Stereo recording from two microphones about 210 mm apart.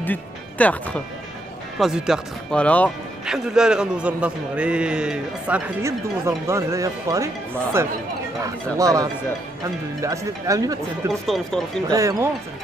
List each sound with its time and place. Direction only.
0.0 s speech: 10° left (ahead or behind); by 10.8 s 15° right (ahead or behind)
11.1 s speech: centre (ahead or behind)
11.9 s speech: 15° right (ahead or behind)